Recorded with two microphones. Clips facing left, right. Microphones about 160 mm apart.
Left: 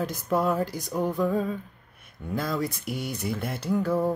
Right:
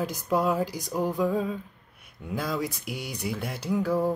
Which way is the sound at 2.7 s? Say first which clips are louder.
Left 3 dB; 50° left (ahead or behind).